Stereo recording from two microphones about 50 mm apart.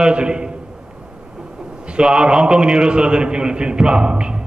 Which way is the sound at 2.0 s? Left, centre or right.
Centre.